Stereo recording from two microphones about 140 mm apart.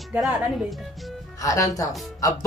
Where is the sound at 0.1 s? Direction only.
Centre (ahead or behind).